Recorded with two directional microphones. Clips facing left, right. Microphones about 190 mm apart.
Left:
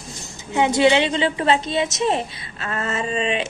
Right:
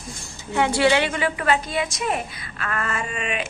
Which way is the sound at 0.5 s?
20° left (ahead or behind).